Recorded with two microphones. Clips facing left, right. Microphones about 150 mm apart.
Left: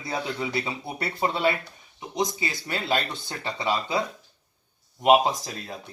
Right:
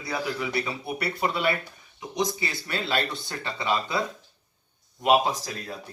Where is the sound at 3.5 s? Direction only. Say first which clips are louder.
Even; 20° left (ahead or behind).